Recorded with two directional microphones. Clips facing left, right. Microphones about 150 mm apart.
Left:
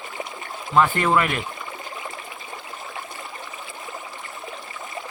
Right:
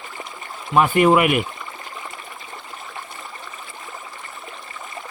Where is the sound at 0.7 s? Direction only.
15° right (ahead or behind).